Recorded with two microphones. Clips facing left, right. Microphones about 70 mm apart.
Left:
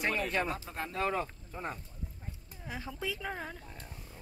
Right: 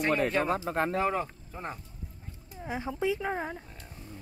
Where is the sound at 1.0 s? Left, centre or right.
Centre.